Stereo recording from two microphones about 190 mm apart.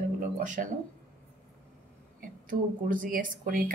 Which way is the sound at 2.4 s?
45° right (ahead or behind).